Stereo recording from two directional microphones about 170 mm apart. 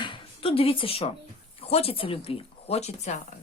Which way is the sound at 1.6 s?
35° left (ahead or behind).